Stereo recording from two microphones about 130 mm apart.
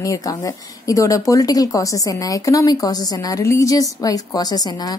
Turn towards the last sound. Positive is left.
turn(degrees=30)  # may be behind; listen again after turning